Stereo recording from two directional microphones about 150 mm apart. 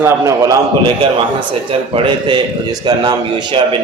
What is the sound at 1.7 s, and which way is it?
A man's voice, 35° right (ahead or behind).